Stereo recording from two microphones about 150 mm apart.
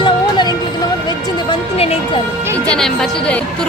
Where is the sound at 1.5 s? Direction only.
40° left (ahead or behind).